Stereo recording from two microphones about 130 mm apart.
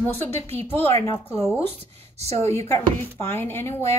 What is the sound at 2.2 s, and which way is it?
Speech, 55° right (ahead or behind).